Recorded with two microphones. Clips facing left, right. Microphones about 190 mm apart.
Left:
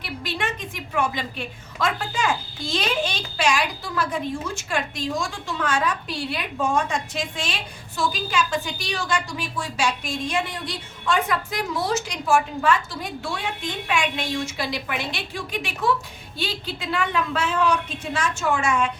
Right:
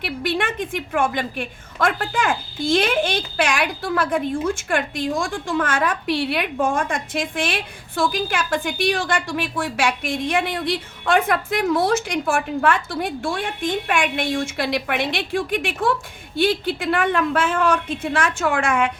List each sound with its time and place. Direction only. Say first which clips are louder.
0.0 s a woman's voice: right 6 dB; 60° right (ahead or behind)